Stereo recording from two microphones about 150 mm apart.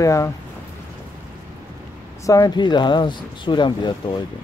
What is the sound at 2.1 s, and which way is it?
Speech, 20° left (ahead or behind).